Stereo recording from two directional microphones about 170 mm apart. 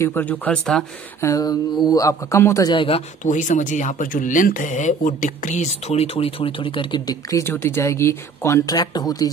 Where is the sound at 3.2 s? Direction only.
45° left (ahead or behind).